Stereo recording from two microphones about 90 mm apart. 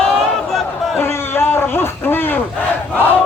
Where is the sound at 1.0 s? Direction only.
25° left (ahead or behind).